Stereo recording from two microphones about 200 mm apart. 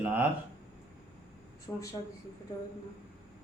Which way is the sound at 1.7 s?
10° left (ahead or behind).